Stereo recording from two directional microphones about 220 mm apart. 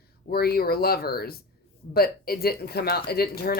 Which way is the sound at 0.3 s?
45° left (ahead or behind).